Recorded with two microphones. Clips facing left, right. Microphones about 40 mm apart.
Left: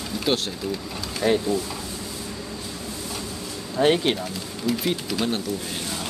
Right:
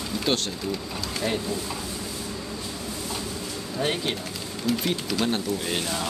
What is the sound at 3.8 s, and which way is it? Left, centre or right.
Speech, left.